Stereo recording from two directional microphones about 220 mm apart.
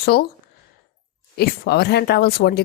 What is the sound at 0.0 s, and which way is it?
Speech, 45° left (ahead or behind).